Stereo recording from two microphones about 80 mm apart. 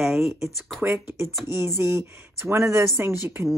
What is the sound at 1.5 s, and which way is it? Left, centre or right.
Speech, right.